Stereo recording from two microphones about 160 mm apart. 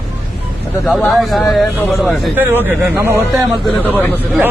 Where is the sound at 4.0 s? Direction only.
10° left (ahead or behind).